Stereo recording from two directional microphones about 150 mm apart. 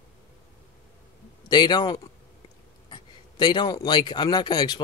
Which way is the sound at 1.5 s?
30° left (ahead or behind).